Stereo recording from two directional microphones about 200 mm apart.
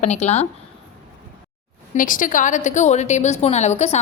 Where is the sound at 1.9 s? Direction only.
40° left (ahead or behind).